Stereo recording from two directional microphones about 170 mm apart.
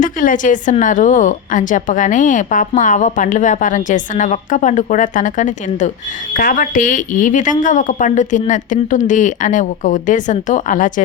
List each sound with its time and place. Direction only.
0.0 s a woman's voice: 50° left (ahead or behind)